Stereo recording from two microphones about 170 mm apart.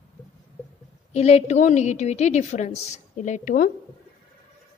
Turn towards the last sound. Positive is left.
turn(degrees=50)  # may be behind; listen again after turning